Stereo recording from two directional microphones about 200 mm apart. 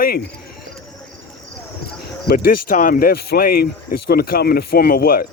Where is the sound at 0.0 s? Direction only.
50° left (ahead or behind).